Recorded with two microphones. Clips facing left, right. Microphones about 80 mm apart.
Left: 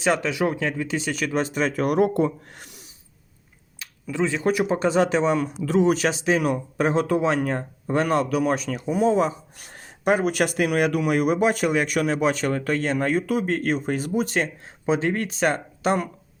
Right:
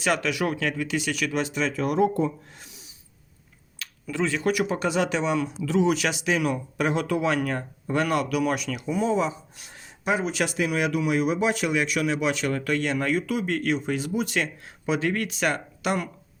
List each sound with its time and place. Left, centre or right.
0.0 s speech: left
3.8 s speech: left